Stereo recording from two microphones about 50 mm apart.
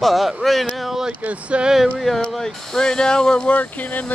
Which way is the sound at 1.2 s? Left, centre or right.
Right.